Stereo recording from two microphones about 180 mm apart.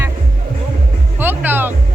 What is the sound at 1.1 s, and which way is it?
Music, 10° right (ahead or behind).